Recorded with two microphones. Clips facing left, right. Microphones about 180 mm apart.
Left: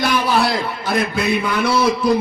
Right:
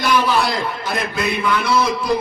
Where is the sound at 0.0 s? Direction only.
55° left (ahead or behind).